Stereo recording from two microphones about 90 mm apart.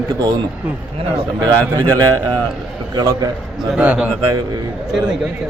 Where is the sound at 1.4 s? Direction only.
45° right (ahead or behind).